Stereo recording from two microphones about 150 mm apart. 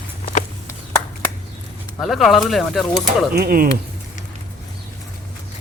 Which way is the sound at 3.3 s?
85° right.